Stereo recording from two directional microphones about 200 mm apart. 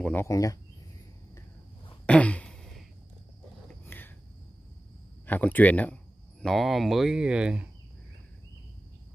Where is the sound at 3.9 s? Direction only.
10° left (ahead or behind).